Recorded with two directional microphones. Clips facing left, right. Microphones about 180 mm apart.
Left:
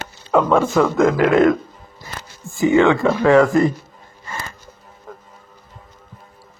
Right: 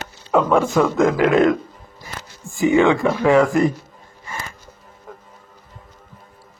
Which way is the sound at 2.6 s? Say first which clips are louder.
Left 1 dB; 15° right (ahead or behind).